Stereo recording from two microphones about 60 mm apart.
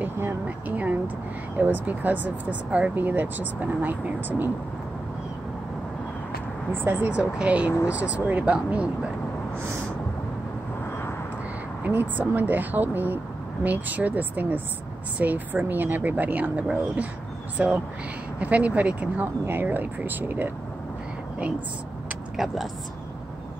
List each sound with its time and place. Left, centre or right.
0.0 s vehicle: right
1.6 s speech: right
6.7 s speech: right
7.1 s speech: right
11.8 s speech: right
19.4 s speech: right
22.4 s speech: centre